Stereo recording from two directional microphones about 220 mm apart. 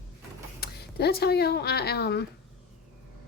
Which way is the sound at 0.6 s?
45° left (ahead or behind).